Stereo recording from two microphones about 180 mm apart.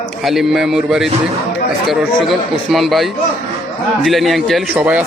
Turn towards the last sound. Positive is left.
turn(degrees=-10)  # may be behind; listen again after turning